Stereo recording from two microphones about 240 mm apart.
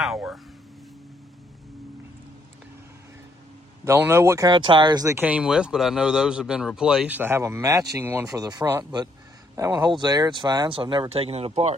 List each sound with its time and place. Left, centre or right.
0.0 s speech: centre
3.8 s speech: centre; by 11.7 s right